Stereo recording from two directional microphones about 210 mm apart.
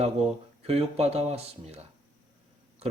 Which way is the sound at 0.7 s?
30° right (ahead or behind).